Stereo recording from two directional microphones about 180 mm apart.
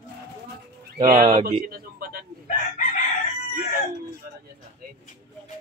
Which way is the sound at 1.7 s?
55° right (ahead or behind).